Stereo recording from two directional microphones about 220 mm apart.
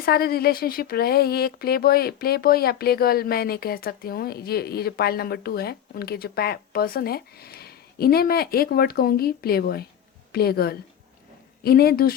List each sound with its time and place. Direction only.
0.0 s speech: 45° left (ahead or behind)